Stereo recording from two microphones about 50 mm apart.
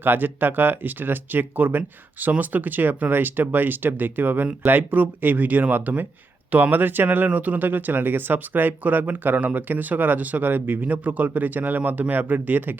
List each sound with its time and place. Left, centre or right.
0.0 s speech: right